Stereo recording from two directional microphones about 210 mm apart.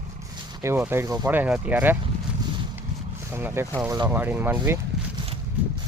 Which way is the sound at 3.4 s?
10° right (ahead or behind).